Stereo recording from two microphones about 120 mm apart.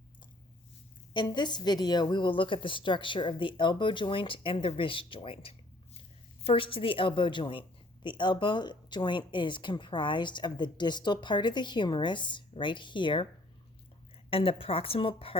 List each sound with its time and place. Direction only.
1.1 s a woman's voice: 40° left (ahead or behind)
14.3 s a woman's voice: 50° left (ahead or behind)